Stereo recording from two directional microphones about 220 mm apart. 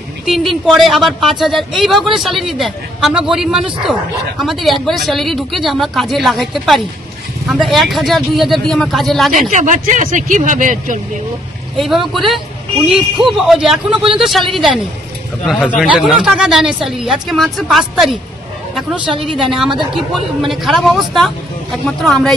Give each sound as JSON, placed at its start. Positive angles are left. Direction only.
{"t": 0.2, "sound": "a woman's voice", "side_deg": 0}
{"t": 9.3, "sound": "speech", "side_deg": -35}
{"t": 11.7, "sound": "speech", "side_deg": 0}